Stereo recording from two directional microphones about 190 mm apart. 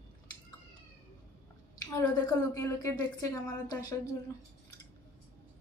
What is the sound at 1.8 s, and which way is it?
A woman's voice, 20° left (ahead or behind).